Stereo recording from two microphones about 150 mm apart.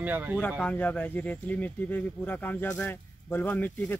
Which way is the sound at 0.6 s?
10° left (ahead or behind).